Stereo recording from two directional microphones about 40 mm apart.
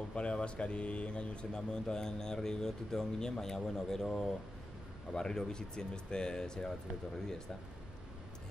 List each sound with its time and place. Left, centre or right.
0.1 s speech: left